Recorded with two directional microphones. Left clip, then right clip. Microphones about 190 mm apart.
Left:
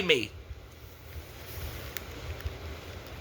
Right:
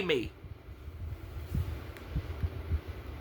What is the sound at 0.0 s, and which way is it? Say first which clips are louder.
Speech: left 5 dB; 20° right (ahead or behind).